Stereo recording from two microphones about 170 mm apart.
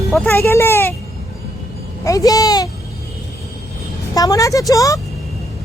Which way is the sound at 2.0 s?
20° left (ahead or behind).